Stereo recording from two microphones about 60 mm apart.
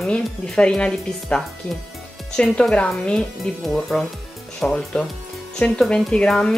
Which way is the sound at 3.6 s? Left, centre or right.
Centre.